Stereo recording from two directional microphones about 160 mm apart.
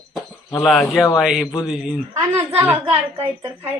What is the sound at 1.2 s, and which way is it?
Speech, 5° right (ahead or behind).